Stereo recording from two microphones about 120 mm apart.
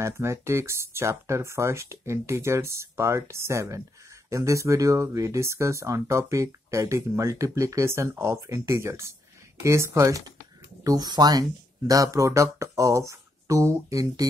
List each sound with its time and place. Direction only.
0.0 s speech: 25° right (ahead or behind)